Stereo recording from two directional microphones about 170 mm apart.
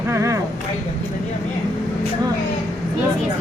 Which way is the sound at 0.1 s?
15° right (ahead or behind).